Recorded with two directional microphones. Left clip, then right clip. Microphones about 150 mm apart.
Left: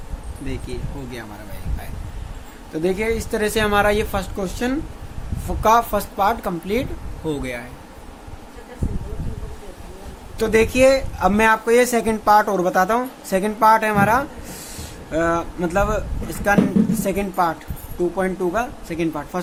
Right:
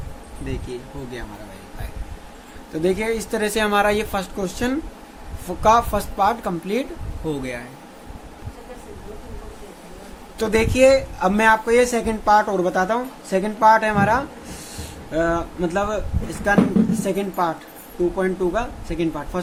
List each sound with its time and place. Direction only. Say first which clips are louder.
2.7 s speech: even; 10° left (ahead or behind)
10.3 s speech: left 2 dB; 10° left (ahead or behind)